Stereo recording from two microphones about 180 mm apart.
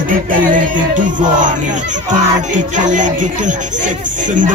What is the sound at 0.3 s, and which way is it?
Speech, 45° right (ahead or behind).